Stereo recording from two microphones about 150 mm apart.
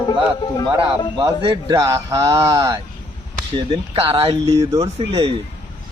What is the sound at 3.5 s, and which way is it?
Speech, 35° right (ahead or behind).